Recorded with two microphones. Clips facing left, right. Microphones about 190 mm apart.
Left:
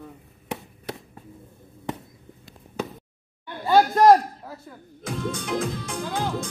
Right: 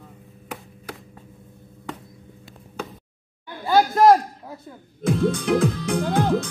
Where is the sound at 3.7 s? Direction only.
Centre (ahead or behind).